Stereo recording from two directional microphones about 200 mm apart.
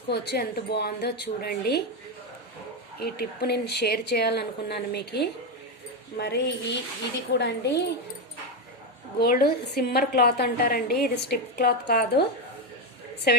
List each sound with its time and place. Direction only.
0.1 s a woman's voice: 50° left (ahead or behind)
3.0 s a woman's voice: 55° left (ahead or behind)
9.1 s a woman's voice: 50° left (ahead or behind)
13.3 s a woman's voice: 55° left (ahead or behind)